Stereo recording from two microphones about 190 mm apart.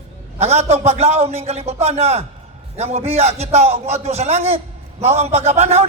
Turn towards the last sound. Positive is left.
turn(degrees=-35)  # may be behind; listen again after turning